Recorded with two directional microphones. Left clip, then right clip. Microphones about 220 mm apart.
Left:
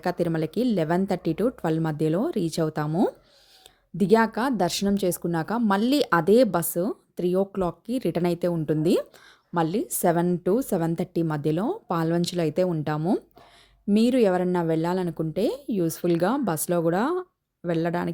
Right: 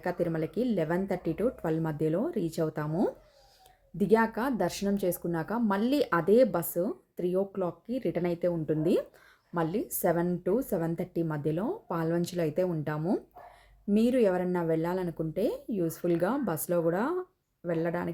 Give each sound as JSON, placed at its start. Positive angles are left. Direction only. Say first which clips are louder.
{"t": 0.0, "sound": "speech", "louder": "left 5 dB", "side_deg": 45}